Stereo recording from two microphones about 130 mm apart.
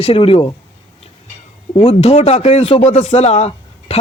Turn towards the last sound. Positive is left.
turn(degrees=55)  # may be behind; listen again after turning